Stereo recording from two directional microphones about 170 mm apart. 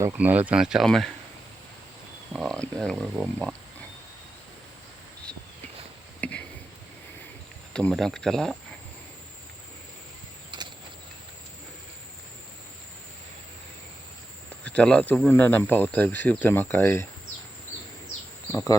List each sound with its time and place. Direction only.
0.0 s speech: 10° right (ahead or behind)
2.3 s speech: centre (ahead or behind)
6.1 s a sound: 10° left (ahead or behind)
7.7 s speech: 5° left (ahead or behind)
10.5 s a sound: 25° right (ahead or behind)
14.6 s speech: 5° left (ahead or behind)
18.5 s speech: 15° left (ahead or behind)